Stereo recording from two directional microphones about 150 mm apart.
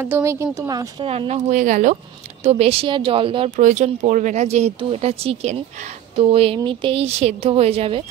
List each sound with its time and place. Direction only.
0.0 s speech: 15° right (ahead or behind)
1.0 s speech: 40° right (ahead or behind); by 2.0 s 55° right (ahead or behind)
2.4 s speech: 45° right (ahead or behind)
3.5 s speech: 55° right (ahead or behind)